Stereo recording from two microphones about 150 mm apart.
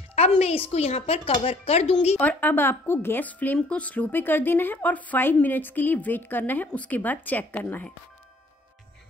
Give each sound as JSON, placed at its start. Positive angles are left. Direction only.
{"t": 0.4, "sound": "speech", "side_deg": 40}
{"t": 2.1, "sound": "speech", "side_deg": 10}